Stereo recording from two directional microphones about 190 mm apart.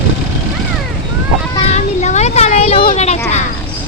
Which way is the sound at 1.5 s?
35° left (ahead or behind).